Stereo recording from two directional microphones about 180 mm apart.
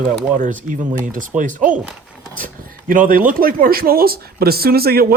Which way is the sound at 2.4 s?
50° right (ahead or behind).